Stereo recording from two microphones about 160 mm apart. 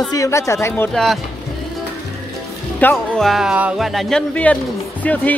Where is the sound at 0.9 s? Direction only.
Centre (ahead or behind).